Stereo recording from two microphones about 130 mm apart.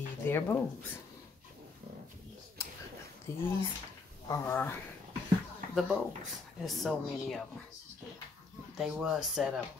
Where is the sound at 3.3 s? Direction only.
20° left (ahead or behind).